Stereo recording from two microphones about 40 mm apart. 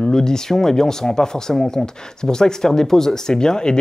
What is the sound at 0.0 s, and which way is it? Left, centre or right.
Speech, centre.